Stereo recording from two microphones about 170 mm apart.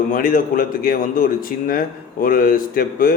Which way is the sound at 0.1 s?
55° left (ahead or behind).